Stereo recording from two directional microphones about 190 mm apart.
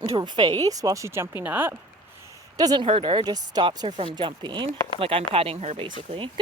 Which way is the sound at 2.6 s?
25° right (ahead or behind).